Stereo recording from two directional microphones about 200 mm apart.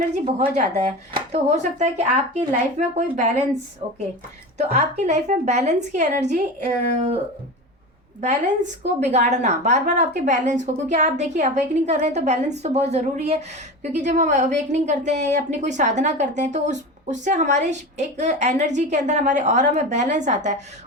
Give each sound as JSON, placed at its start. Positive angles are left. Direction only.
{"t": 0.3, "sound": "a woman's voice", "side_deg": -35}
{"t": 4.5, "sound": "a woman's voice", "side_deg": -35}
{"t": 8.2, "sound": "a woman's voice", "side_deg": -35}